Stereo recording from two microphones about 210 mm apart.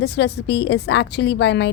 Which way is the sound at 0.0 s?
50° left (ahead or behind).